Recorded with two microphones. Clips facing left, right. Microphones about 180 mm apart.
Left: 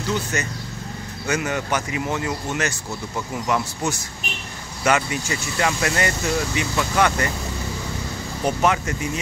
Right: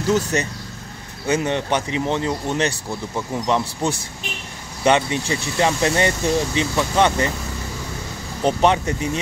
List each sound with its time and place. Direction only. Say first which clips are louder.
0.1 s speech: right 6 dB; 35° right (ahead or behind)
8.5 s speech: right 3 dB; 25° right (ahead or behind)